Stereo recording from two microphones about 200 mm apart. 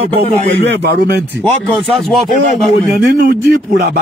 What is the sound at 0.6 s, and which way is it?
Speech, 60° right (ahead or behind).